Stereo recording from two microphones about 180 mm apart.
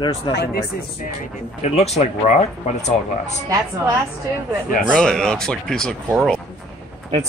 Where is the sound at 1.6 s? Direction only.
35° left (ahead or behind).